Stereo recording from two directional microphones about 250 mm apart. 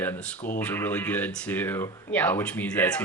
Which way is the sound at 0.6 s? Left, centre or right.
Centre.